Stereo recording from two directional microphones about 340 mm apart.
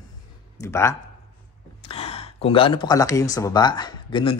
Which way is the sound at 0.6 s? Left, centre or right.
Centre.